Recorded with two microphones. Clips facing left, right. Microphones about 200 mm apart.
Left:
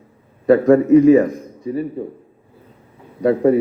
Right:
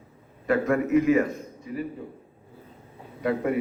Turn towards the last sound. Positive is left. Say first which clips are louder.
# left 11 dB
turn(degrees=35)  # may be behind; listen again after turning